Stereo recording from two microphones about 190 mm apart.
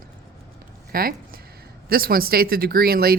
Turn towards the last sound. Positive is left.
turn(degrees=-55)  # may be behind; listen again after turning